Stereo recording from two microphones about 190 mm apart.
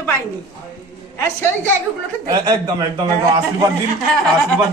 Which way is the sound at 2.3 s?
20° right (ahead or behind).